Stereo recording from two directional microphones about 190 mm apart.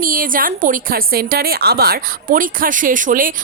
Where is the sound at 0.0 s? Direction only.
45° right (ahead or behind).